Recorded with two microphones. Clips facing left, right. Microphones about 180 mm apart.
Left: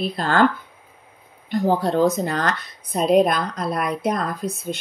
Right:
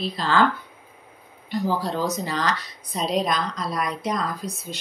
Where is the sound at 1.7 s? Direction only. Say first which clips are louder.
Left 7 dB; 55° left (ahead or behind).